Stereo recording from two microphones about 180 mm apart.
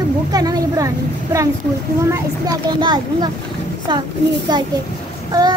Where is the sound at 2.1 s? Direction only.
20° right (ahead or behind).